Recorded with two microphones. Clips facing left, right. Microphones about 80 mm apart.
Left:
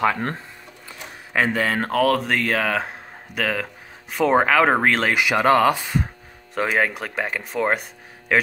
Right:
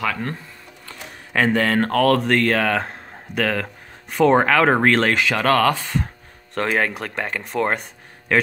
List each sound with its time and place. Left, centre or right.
0.0 s speech: left
0.8 s speech: centre
5.2 s speech: centre